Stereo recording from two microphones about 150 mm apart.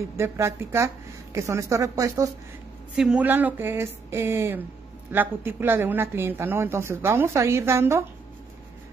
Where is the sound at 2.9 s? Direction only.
5° right (ahead or behind).